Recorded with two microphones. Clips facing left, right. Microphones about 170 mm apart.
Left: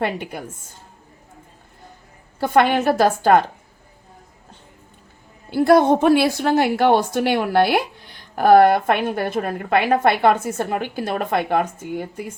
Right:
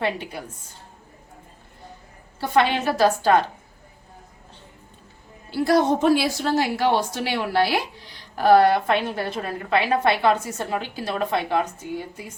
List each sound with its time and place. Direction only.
0.0 s a woman's voice: 50° left (ahead or behind)
2.4 s a woman's voice: 50° left (ahead or behind)
5.5 s a woman's voice: 55° left (ahead or behind)